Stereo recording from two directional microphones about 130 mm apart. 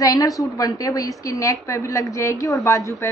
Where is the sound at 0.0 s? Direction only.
25° left (ahead or behind).